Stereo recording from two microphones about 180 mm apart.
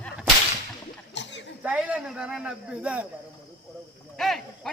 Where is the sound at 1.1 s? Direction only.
80° left.